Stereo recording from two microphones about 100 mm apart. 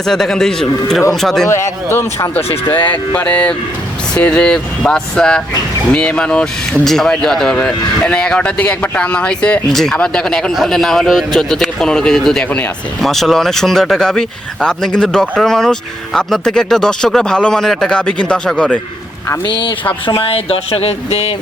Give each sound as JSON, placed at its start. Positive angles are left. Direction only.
{"t": 0.0, "sound": "speech", "side_deg": 5}
{"t": 1.5, "sound": "speech", "side_deg": 25}
{"t": 2.9, "sound": "speech", "side_deg": 15}
{"t": 20.1, "sound": "speech", "side_deg": 65}